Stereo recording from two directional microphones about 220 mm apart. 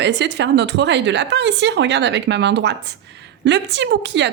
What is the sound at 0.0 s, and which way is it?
A woman's voice, 50° right (ahead or behind).